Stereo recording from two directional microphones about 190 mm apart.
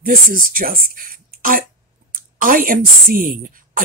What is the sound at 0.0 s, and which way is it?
A woman's voice, 45° right (ahead or behind).